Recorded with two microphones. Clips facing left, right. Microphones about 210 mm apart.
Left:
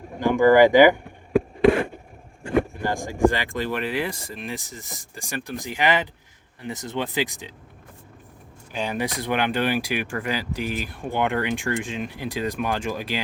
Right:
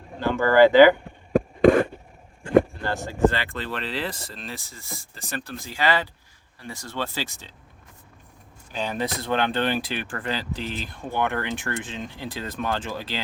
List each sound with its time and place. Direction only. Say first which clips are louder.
0.2 s speech: left 2 dB; 15° left (ahead or behind)
2.7 s speech: left 2 dB; 10° left (ahead or behind)
8.7 s speech: left 1 dB; 10° left (ahead or behind)